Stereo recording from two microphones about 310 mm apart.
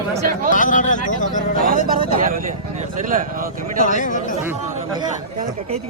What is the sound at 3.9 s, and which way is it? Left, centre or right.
Speech, left.